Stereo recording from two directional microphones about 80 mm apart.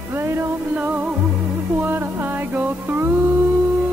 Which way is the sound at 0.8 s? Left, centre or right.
Centre.